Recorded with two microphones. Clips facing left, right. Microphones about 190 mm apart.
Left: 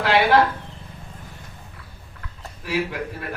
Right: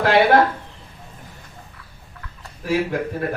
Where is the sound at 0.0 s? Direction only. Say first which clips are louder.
Right 3 dB; 50° right (ahead or behind).